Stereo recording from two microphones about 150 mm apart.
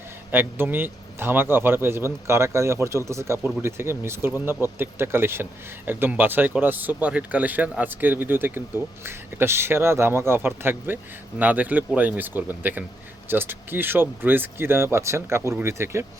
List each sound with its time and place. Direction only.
0.3 s speech: 15° right (ahead or behind)